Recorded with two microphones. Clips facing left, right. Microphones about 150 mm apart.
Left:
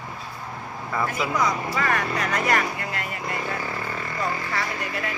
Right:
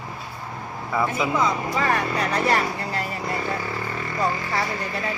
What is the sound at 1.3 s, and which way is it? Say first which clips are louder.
Speech: even; 25° right (ahead or behind).